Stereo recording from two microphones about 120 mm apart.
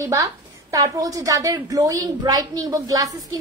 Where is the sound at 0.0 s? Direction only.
25° right (ahead or behind).